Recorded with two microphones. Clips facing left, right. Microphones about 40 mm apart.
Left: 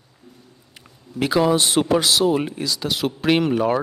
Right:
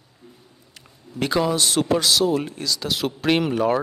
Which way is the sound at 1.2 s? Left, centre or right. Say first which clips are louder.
Left 3 dB; centre.